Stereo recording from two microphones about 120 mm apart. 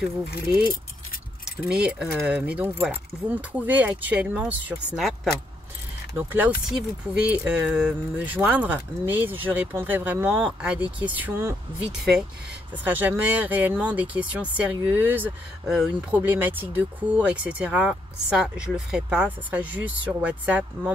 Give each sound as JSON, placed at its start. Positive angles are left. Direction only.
{"t": 0.0, "sound": "speech", "side_deg": -10}
{"t": 1.7, "sound": "speech", "side_deg": -10}
{"t": 4.9, "sound": "speech", "side_deg": 0}
{"t": 6.1, "sound": "speech", "side_deg": -15}
{"t": 11.8, "sound": "speech", "side_deg": -5}
{"t": 12.8, "sound": "speech", "side_deg": -15}
{"t": 15.7, "sound": "speech", "side_deg": -5}
{"t": 16.2, "sound": "speech", "side_deg": -15}